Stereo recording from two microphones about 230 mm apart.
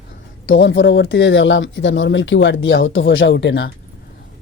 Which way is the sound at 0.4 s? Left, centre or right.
Left.